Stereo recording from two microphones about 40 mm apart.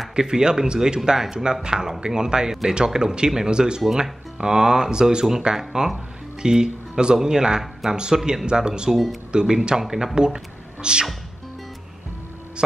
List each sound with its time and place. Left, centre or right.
0.2 s speech: centre
8.9 s speech: centre
9.3 s speech: centre
10.1 s speech: centre
12.6 s speech: right